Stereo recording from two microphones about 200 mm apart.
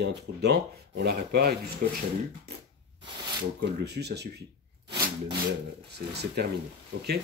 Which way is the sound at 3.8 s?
55° right (ahead or behind).